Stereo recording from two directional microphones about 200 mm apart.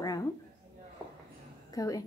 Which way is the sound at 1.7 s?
15° left (ahead or behind).